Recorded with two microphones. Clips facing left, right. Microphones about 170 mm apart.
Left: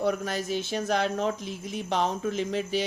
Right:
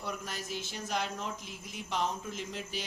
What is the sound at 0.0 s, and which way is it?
Speech, 75° left (ahead or behind).